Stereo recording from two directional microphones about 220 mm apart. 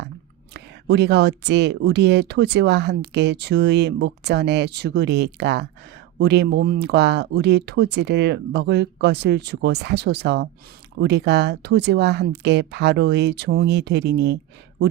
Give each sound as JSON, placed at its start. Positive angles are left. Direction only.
{"t": 0.5, "sound": "speech", "side_deg": -50}